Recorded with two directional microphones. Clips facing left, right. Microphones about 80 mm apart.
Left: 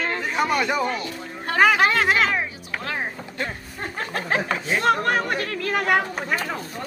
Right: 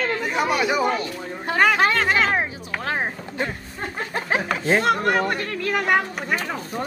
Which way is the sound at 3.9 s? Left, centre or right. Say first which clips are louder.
Even; centre.